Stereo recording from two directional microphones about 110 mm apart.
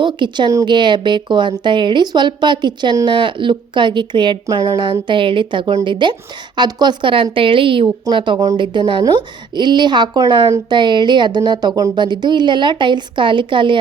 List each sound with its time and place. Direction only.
0.0 s speech: 45° right (ahead or behind)
4.4 s a woman's voice: 30° right (ahead or behind)
4.9 s a woman's voice: 45° right (ahead or behind)